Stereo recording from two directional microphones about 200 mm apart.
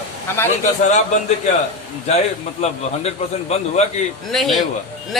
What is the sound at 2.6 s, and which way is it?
A man's voice, 30° left (ahead or behind).